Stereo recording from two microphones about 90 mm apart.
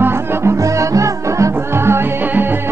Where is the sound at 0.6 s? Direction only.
35° right (ahead or behind).